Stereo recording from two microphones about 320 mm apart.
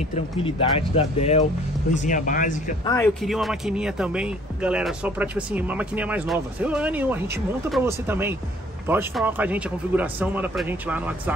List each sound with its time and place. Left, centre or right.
0.1 s speech: centre
2.8 s speech: centre